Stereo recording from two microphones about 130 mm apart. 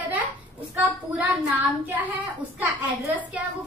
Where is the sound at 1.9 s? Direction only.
15° right (ahead or behind).